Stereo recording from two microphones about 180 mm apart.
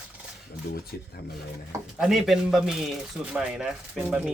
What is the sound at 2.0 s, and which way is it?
Speech, centre (ahead or behind).